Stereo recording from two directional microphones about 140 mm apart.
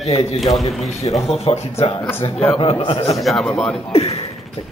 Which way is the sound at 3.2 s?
Centre (ahead or behind).